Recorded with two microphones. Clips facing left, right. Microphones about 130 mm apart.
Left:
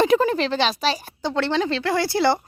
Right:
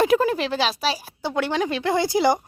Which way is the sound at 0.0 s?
5° right (ahead or behind).